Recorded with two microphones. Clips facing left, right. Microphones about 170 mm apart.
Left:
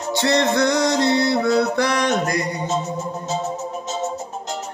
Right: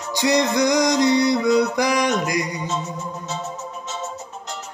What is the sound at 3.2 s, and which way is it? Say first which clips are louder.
Music: left 5 dB; 40° left (ahead or behind).